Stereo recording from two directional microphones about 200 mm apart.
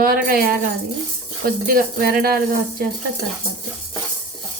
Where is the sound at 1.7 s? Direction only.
45° right (ahead or behind).